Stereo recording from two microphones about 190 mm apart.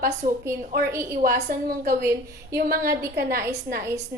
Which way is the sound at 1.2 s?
50° right (ahead or behind).